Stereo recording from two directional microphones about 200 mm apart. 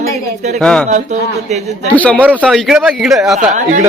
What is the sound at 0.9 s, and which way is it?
A man's voice, 35° right (ahead or behind).